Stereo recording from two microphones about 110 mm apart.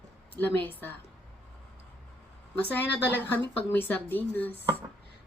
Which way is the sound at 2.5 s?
15° left (ahead or behind).